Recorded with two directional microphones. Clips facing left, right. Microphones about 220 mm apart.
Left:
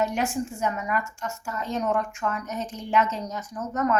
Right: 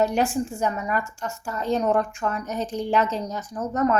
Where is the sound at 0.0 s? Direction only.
35° right (ahead or behind).